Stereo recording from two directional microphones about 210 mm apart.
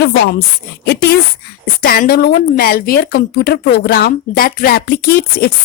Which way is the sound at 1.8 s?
45° left (ahead or behind).